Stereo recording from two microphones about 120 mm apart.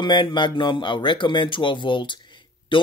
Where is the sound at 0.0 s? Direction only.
40° left (ahead or behind).